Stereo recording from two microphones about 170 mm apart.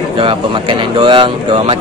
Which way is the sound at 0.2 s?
30° right (ahead or behind).